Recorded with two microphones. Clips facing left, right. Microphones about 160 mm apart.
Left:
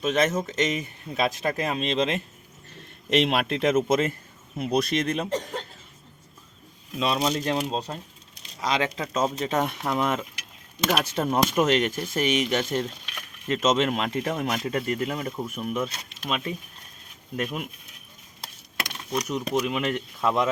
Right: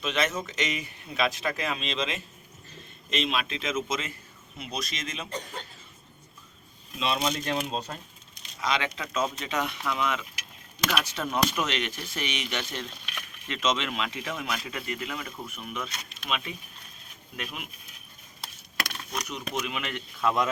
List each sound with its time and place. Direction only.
0.0 s speech: 45° left (ahead or behind)
2.6 s speech: 65° left (ahead or behind)
7.0 s speech: 35° left (ahead or behind)
18.8 s dishes: 20° left (ahead or behind)
19.3 s speech: 40° left (ahead or behind)
20.2 s speech: 25° left (ahead or behind)